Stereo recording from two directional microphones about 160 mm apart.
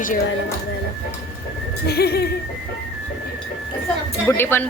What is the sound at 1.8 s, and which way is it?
Neigh, 85° left.